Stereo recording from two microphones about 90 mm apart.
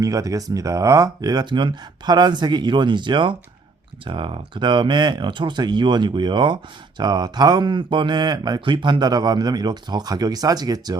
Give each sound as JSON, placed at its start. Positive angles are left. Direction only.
{"t": 0.0, "sound": "speech", "side_deg": -40}